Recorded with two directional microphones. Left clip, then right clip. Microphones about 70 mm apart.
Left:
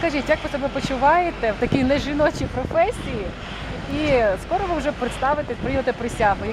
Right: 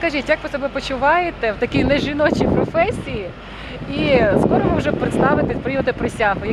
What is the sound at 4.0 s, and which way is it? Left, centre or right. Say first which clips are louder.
Speech: right 4 dB; right.